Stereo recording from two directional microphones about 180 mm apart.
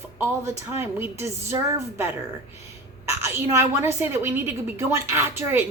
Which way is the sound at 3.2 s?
15° right (ahead or behind).